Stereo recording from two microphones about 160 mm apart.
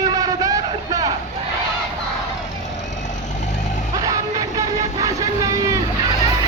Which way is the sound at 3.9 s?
25° right (ahead or behind).